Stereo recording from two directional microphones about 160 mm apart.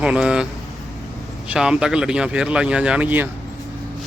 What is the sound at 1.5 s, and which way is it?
Speech, 5° right (ahead or behind).